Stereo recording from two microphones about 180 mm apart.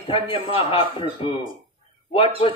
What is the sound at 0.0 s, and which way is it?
Speech, 30° left (ahead or behind).